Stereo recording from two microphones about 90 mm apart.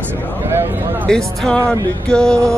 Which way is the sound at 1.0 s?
10° left (ahead or behind).